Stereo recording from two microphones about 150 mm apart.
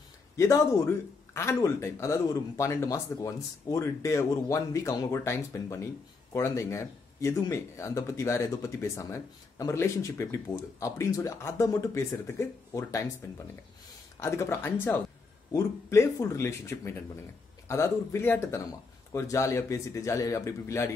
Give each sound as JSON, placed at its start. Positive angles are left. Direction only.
{"t": 0.4, "sound": "speech", "side_deg": 20}
{"t": 14.2, "sound": "speech", "side_deg": 20}